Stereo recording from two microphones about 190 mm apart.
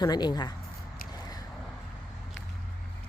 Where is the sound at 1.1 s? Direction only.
20° left (ahead or behind).